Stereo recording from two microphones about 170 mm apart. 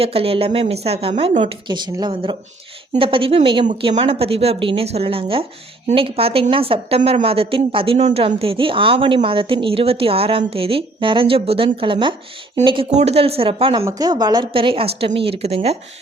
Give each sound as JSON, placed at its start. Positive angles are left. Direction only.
{"t": 0.0, "sound": "a woman's voice", "side_deg": -35}